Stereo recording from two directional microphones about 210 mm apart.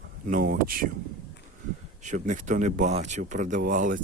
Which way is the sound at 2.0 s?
35° right (ahead or behind).